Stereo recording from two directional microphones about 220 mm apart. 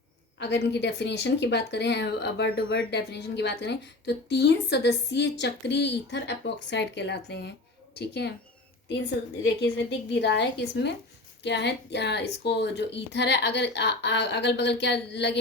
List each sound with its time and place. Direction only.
0.3 s speech: 50° left (ahead or behind)